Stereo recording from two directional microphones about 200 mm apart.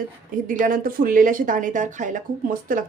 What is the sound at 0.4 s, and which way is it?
A woman's voice, 40° right (ahead or behind).